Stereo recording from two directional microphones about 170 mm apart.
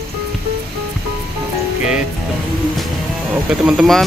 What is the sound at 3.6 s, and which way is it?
Speech, centre (ahead or behind).